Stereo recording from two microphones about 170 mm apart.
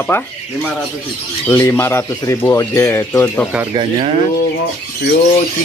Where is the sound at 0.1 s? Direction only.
10° left (ahead or behind).